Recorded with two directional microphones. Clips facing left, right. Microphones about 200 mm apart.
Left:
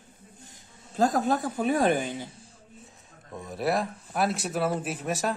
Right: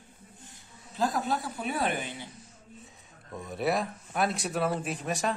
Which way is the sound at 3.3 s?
Centre (ahead or behind).